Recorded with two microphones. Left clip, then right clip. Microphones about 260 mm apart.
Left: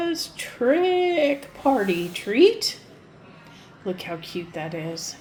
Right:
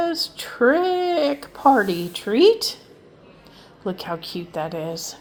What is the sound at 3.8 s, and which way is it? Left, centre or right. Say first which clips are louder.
Speech: right 3 dB; right.